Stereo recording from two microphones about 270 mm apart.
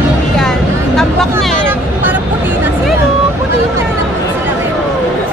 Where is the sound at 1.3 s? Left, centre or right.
Centre.